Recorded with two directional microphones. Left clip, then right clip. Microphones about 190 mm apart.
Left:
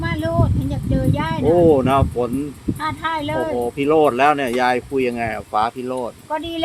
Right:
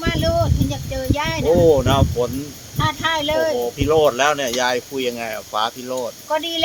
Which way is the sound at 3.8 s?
50° left (ahead or behind).